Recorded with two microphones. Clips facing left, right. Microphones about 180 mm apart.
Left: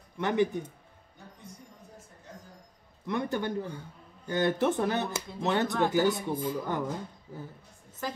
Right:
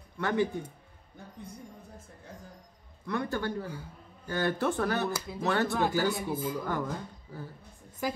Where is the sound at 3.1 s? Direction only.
20° left (ahead or behind).